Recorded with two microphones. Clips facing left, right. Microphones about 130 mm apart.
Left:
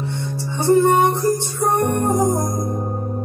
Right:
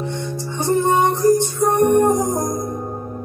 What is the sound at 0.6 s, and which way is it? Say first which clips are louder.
Music: left 3 dB; 15° right (ahead or behind).